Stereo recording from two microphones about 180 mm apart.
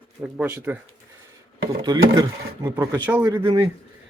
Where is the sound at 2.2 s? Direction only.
15° right (ahead or behind).